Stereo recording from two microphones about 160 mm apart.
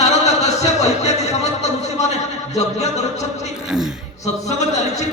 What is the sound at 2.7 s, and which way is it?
Speech, 45° left (ahead or behind).